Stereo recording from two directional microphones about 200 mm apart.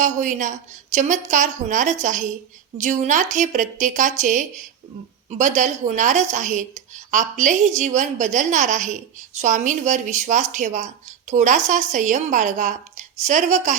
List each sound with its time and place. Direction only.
0.0 s a woman's voice: 40° right (ahead or behind)